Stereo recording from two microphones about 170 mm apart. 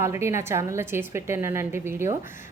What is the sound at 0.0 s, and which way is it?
A woman's voice, 15° right (ahead or behind).